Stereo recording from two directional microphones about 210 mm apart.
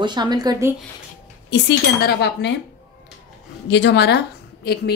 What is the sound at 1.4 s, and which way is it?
Speech, 55° left (ahead or behind).